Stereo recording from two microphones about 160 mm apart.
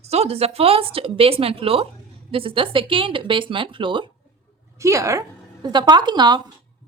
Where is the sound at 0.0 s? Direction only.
40° right (ahead or behind).